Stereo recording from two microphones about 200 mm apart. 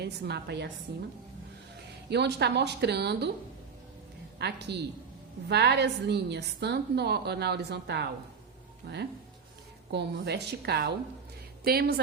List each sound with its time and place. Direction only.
0.0 s a woman's voice: 55° right (ahead or behind)
2.0 s a woman's voice: 55° right (ahead or behind)
4.4 s a woman's voice: 55° right (ahead or behind)